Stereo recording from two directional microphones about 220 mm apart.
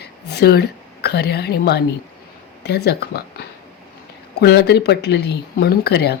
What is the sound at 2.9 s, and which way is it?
Speech, 45° left (ahead or behind).